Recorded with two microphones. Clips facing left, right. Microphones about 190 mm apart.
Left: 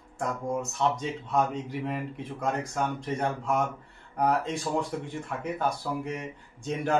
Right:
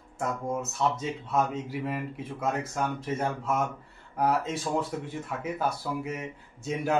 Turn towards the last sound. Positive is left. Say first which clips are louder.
# left 1 dB
turn(degrees=-5)  # may be behind; listen again after turning